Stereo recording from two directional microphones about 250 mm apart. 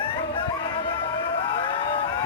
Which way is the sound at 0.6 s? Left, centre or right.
Centre.